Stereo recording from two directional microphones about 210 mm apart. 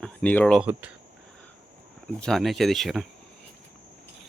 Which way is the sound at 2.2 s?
Centre (ahead or behind).